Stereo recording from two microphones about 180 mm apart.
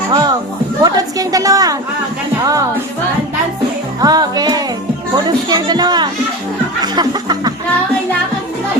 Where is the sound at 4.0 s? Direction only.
20° right (ahead or behind).